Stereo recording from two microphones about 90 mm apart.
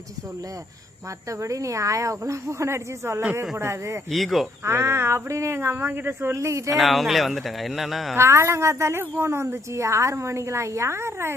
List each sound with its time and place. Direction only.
1.3 s a woman's voice: 35° right (ahead or behind)
4.1 s speech: centre (ahead or behind)
4.6 s speech: 30° right (ahead or behind)
6.7 s speech: centre (ahead or behind)
8.1 s a woman's voice: 30° right (ahead or behind)